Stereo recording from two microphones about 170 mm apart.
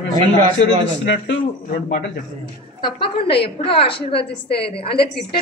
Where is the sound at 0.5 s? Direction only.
90° left.